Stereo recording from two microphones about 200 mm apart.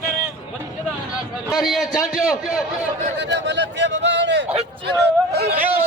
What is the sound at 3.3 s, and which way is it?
Speech, 60° right (ahead or behind).